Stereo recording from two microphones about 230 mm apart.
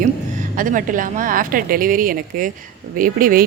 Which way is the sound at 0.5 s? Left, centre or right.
Right.